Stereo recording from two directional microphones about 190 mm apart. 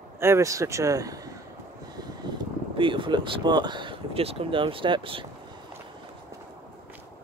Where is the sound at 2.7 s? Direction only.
25° right (ahead or behind).